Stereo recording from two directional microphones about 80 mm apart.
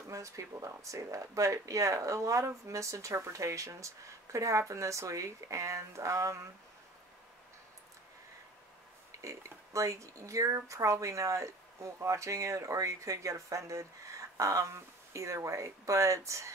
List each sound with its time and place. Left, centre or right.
0.1 s speech: right
9.2 s speech: right